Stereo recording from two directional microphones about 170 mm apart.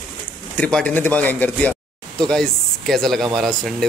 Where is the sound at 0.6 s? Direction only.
5° left (ahead or behind).